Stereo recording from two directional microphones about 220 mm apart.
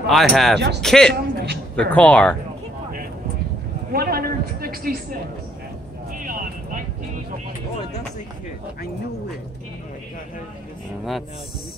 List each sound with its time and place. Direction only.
0.0 s speech: centre (ahead or behind)
1.1 s a man's voice: 50° right (ahead or behind)
1.8 s speech: 5° left (ahead or behind)
3.9 s a sound: 45° right (ahead or behind)
6.1 s vehicle: 40° right (ahead or behind)